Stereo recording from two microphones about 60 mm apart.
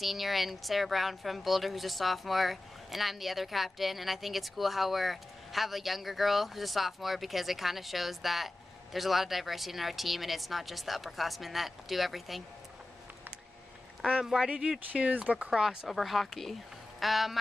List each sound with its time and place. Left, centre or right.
0.0 s a woman's voice: centre
14.0 s speech: centre
15.5 s speech: centre
15.9 s a woman's voice: centre